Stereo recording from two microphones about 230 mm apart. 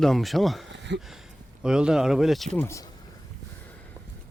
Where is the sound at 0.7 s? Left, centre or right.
Right.